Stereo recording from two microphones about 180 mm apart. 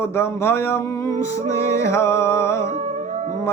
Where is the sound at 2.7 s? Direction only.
40° right (ahead or behind).